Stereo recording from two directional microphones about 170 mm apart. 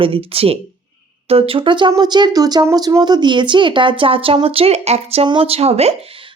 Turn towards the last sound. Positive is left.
turn(degrees=-35)  # may be behind; listen again after turning